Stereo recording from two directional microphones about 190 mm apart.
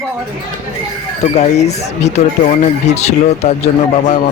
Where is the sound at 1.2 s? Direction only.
35° left (ahead or behind).